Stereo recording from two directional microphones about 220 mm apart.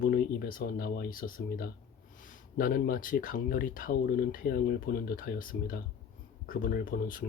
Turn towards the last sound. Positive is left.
turn(degrees=40)  # may be behind; listen again after turning